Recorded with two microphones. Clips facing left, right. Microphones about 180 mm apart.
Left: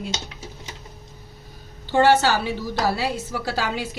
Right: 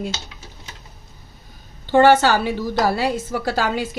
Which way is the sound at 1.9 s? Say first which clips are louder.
Right 4 dB; 50° right (ahead or behind).